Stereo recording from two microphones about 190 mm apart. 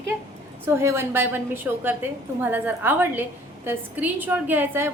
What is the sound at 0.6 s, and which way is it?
A woman's voice, 15° right (ahead or behind).